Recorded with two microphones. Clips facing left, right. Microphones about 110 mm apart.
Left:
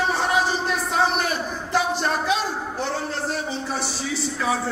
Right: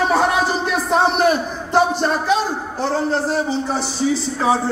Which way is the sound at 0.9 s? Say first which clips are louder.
Right 8 dB; 45° right (ahead or behind).